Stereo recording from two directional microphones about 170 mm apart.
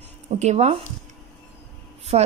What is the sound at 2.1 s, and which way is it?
Speech, 40° right (ahead or behind).